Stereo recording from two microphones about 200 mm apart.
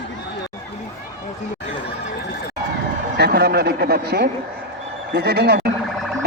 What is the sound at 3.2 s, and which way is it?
Speech, 55° right (ahead or behind).